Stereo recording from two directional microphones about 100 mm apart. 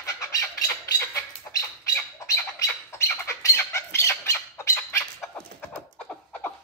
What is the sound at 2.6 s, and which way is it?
Squawk, 30° left (ahead or behind).